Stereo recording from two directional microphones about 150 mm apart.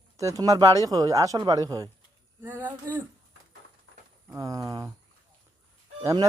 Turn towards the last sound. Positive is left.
turn(degrees=-25)  # may be behind; listen again after turning